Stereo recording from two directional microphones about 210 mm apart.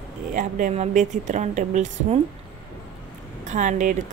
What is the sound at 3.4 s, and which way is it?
Speech, 35° right (ahead or behind).